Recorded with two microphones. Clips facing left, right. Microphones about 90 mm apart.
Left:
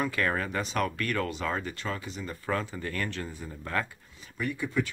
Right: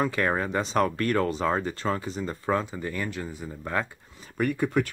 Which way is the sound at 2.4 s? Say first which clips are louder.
Right 4 dB; 20° right (ahead or behind).